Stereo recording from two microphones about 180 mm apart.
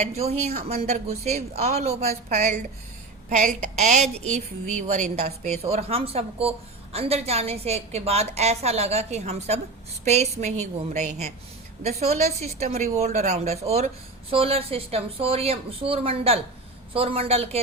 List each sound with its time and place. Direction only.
0.0 s speech: 35° right (ahead or behind)